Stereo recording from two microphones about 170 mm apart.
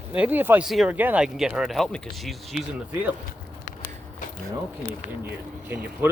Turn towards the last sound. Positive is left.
turn(degrees=-10)  # may be behind; listen again after turning